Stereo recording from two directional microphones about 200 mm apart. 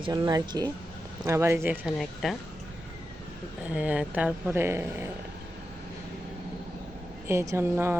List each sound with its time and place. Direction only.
0.0 s speech: 20° right (ahead or behind); by 2.3 s 5° right (ahead or behind)
3.8 s speech: 5° right (ahead or behind)
7.3 s speech: 10° right (ahead or behind)